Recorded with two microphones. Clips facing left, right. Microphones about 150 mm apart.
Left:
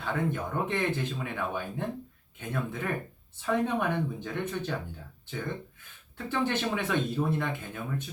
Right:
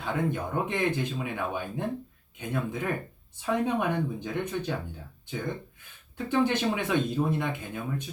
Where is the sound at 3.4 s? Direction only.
15° right (ahead or behind).